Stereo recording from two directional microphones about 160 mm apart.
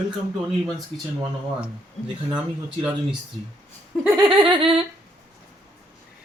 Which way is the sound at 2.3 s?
5° right (ahead or behind).